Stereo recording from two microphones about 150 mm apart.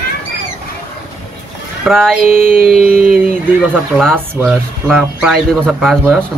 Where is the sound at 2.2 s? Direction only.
70° right (ahead or behind).